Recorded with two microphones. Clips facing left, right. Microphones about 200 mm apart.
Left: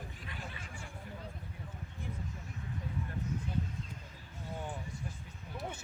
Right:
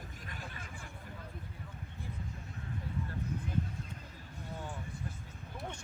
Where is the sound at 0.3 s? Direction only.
45° right (ahead or behind).